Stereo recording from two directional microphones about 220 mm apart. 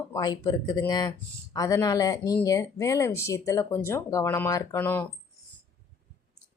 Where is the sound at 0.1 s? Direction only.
20° left (ahead or behind).